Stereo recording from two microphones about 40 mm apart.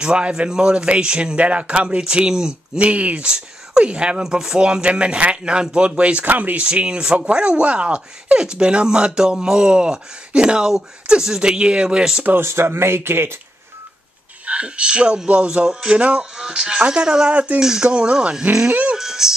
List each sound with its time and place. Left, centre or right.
0.0 s speech: right
2.8 s speech: right
6.2 s speech: right
6.6 s speech: right
12.4 s speech: right
14.4 s speech: right
15.6 s speech: centre
16.0 s speech: right
16.3 s speech: centre
18.7 s a sound: right
18.9 s music: centre